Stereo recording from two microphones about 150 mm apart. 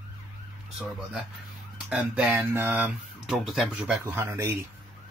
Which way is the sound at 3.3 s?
Centre (ahead or behind).